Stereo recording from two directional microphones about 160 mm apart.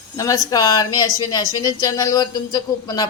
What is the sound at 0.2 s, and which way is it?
A woman's voice, 20° left (ahead or behind).